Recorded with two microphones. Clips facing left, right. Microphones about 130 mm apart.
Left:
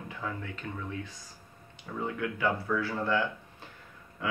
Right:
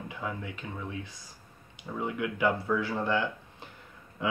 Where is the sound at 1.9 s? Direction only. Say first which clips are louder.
Right 2 dB; 15° right (ahead or behind).